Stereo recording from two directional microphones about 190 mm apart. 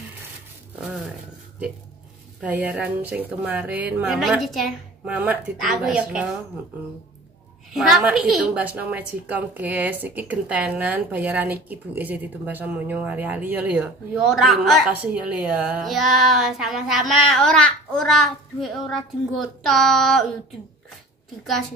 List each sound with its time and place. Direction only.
0.7 s a sound: 5° right (ahead or behind)
2.4 s a woman's voice: 10° right (ahead or behind)
7.7 s a woman's voice: centre (ahead or behind)